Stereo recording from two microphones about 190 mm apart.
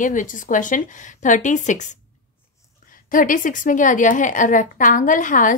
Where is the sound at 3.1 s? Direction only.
45° left (ahead or behind).